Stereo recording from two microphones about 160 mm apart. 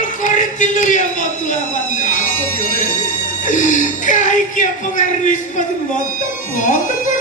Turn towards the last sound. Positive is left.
turn(degrees=60)  # may be behind; listen again after turning